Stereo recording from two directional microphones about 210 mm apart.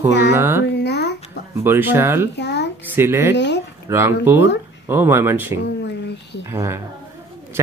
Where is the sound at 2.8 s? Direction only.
10° right (ahead or behind).